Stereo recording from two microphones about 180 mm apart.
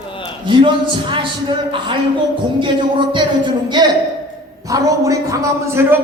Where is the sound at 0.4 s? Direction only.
25° right (ahead or behind).